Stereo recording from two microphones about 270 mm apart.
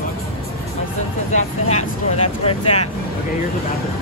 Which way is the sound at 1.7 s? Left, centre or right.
Left.